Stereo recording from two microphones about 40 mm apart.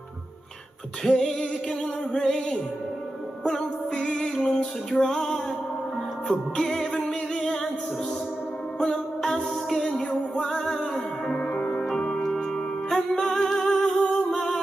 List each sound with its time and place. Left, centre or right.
1.0 s music: centre
8.7 s music: centre
11.3 s music: left
12.2 s music: centre